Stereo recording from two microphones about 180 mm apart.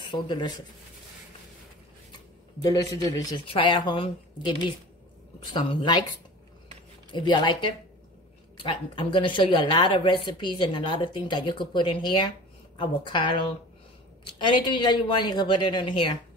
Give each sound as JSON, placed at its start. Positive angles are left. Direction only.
{"t": 0.0, "sound": "speech", "side_deg": 25}
{"t": 2.6, "sound": "speech", "side_deg": 20}
{"t": 7.1, "sound": "speech", "side_deg": 25}